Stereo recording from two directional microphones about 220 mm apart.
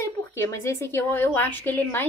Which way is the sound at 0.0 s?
10° left (ahead or behind).